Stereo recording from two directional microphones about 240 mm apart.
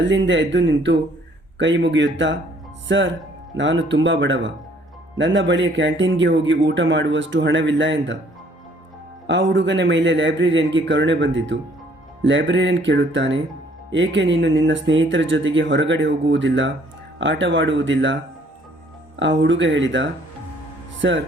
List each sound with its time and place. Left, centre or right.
0.0 s speech: right
9.2 s speech: right